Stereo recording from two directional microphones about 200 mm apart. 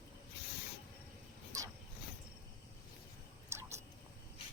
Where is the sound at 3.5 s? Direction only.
15° right (ahead or behind).